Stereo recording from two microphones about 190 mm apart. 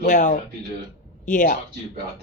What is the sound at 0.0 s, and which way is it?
A woman's voice, 40° left (ahead or behind).